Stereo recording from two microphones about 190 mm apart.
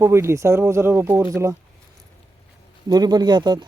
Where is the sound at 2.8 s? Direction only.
20° right (ahead or behind).